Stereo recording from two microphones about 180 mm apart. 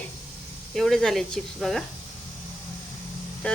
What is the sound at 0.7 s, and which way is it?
Speech, centre (ahead or behind).